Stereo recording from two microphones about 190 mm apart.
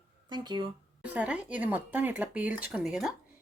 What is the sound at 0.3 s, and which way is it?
Speech, 20° right (ahead or behind).